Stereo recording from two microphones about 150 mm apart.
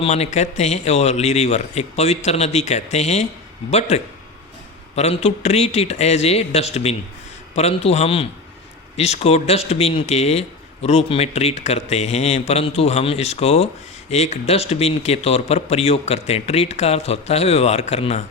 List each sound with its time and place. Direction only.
0.0 s a man's voice: 45° left (ahead or behind)